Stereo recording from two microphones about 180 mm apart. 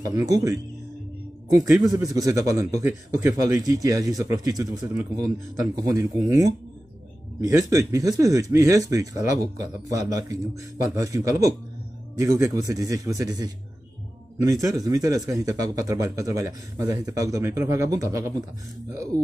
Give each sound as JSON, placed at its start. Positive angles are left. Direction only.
{"t": 0.0, "sound": "speech", "side_deg": -20}
{"t": 1.8, "sound": "speech", "side_deg": -20}